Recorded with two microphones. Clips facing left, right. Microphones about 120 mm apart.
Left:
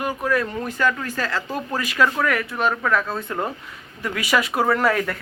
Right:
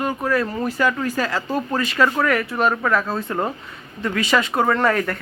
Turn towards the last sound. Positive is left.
turn(degrees=0)  # may be behind; listen again after turning